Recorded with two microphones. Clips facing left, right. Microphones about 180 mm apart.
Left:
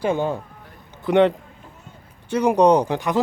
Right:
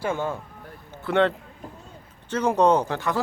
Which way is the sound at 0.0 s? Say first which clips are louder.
Left 5 dB; 15° left (ahead or behind).